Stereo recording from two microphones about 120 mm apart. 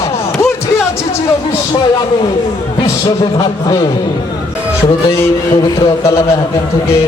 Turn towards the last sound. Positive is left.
turn(degrees=25)  # may be behind; listen again after turning